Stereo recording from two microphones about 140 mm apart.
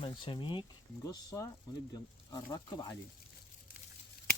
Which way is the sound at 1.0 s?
25° left (ahead or behind).